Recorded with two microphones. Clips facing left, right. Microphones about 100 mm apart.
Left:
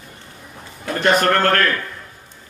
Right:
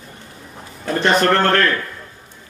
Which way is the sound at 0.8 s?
30° right (ahead or behind).